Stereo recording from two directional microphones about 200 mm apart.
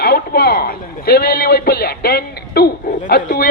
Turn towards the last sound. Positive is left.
turn(degrees=45)  # may be behind; listen again after turning